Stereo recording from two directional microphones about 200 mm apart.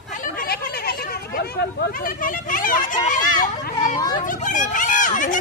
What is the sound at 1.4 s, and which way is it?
Speech, 45° left (ahead or behind).